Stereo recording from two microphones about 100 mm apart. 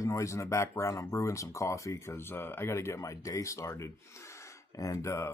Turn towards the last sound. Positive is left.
turn(degrees=30)  # may be behind; listen again after turning